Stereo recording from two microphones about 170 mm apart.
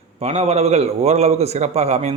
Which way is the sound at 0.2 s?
40° right (ahead or behind).